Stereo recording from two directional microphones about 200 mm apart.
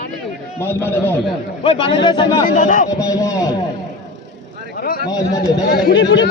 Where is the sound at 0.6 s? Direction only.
10° left (ahead or behind).